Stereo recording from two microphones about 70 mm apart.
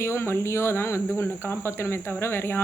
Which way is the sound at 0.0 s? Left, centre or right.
Left.